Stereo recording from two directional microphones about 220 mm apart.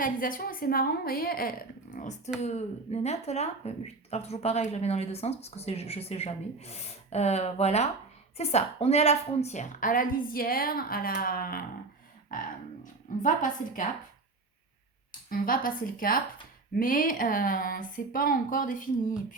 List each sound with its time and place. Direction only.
0.0 s a woman's voice: 40° left (ahead or behind)
12.8 s a woman's voice: 35° left (ahead or behind)
15.3 s a woman's voice: 40° left (ahead or behind)